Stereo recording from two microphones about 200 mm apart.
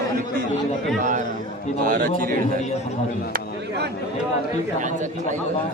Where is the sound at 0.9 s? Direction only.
40° right (ahead or behind).